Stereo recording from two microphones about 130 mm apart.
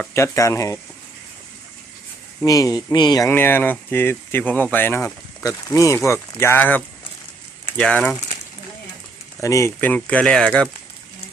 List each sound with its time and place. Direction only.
0.1 s speech: 25° left (ahead or behind)
2.4 s speech: 25° left (ahead or behind)
3.2 s speech: 15° left (ahead or behind)
5.4 s speech: 25° left (ahead or behind); by 8.2 s 10° left (ahead or behind)
9.4 s speech: 25° left (ahead or behind); by 10.7 s 5° left (ahead or behind)